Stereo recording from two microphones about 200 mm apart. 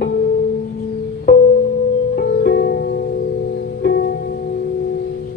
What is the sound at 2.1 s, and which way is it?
Music, 50° left (ahead or behind).